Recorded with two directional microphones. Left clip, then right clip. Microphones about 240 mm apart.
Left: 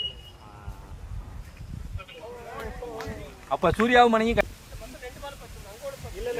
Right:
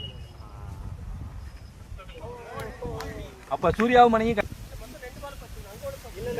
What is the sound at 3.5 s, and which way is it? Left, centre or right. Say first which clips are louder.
Speech: left 1 dB; left.